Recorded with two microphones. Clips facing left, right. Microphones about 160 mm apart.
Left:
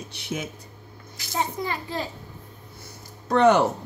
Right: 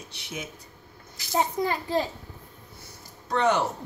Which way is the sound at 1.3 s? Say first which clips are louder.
Right 2 dB; 40° right (ahead or behind).